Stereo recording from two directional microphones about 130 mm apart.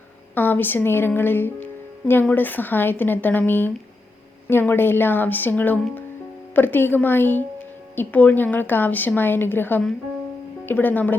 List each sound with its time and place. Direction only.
0.3 s a woman's voice: 15° left (ahead or behind)